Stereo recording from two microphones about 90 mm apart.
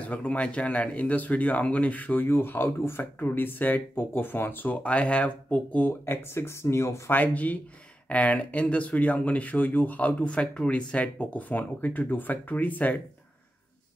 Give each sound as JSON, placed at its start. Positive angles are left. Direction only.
{"t": 0.0, "sound": "speech", "side_deg": 15}
{"t": 7.2, "sound": "speech", "side_deg": 15}